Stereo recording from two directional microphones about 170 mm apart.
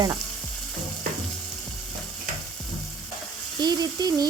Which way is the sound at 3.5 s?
25° right (ahead or behind).